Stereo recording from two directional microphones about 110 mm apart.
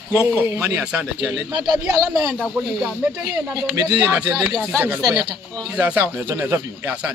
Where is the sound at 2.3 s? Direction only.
5° right (ahead or behind).